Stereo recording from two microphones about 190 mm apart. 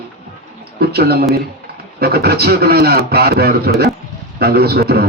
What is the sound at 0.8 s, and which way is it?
A man's voice, 55° right (ahead or behind).